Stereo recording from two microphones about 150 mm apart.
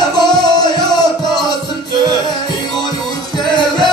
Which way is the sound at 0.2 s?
25° left (ahead or behind).